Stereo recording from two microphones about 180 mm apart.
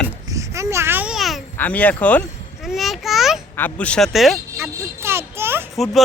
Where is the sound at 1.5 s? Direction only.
10° left (ahead or behind).